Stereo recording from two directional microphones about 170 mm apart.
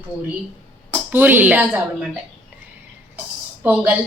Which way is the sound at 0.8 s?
10° right (ahead or behind).